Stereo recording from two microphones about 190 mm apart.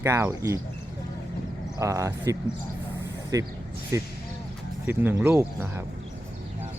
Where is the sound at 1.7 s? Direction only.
15° right (ahead or behind).